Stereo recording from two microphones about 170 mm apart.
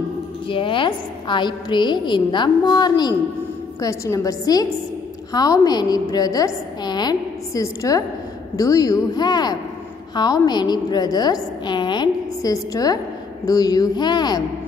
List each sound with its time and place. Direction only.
0.5 s a woman's voice: 30° left (ahead or behind)